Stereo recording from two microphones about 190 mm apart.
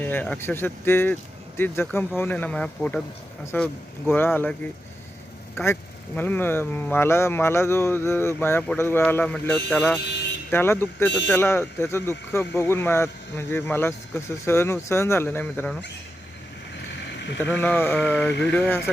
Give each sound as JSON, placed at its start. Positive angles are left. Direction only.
{"t": 0.0, "sound": "speech", "side_deg": 10}
{"t": 6.1, "sound": "speech", "side_deg": 10}
{"t": 10.0, "sound": "vehicle", "side_deg": 65}
{"t": 10.5, "sound": "speech", "side_deg": 10}
{"t": 17.6, "sound": "speech", "side_deg": 10}